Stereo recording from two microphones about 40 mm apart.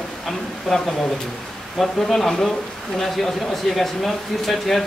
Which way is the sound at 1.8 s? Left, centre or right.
Centre.